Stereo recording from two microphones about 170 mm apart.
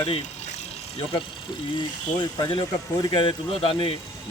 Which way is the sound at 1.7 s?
25° left (ahead or behind).